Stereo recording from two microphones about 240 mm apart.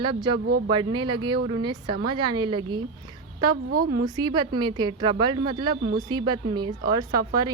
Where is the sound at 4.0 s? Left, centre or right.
Centre.